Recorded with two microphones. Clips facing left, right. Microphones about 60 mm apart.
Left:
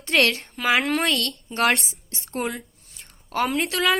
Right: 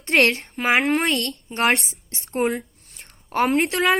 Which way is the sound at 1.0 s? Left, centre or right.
Right.